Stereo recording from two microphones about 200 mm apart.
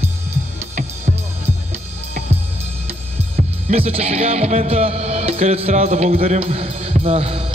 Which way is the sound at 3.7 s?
30° right (ahead or behind).